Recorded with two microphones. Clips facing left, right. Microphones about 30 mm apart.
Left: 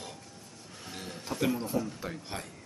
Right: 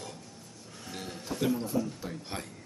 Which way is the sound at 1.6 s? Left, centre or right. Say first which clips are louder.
Right 1 dB; centre.